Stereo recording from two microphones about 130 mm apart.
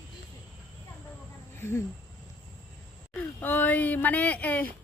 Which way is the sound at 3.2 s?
15° left (ahead or behind).